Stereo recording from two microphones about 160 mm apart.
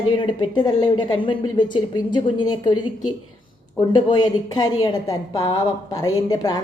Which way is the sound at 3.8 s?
25° left (ahead or behind).